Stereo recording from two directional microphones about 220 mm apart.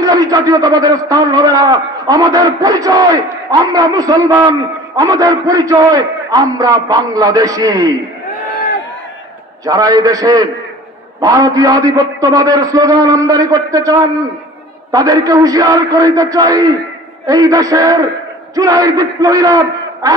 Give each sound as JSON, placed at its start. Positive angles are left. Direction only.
{"t": 0.0, "sound": "a man's voice", "side_deg": -15}
{"t": 9.7, "sound": "a man's voice", "side_deg": -15}